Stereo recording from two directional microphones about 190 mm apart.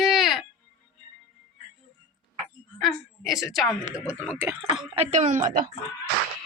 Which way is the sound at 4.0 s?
15° left (ahead or behind).